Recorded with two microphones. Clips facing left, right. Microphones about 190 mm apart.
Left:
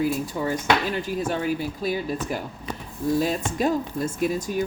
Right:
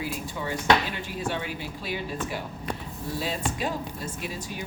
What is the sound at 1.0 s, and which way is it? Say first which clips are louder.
Speech: left 6 dB; 40° left (ahead or behind).